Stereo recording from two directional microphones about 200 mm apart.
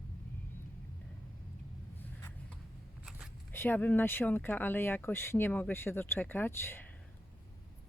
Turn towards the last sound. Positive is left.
turn(degrees=10)  # may be behind; listen again after turning